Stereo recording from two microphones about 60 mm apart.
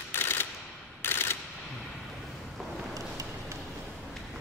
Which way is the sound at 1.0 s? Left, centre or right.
Left.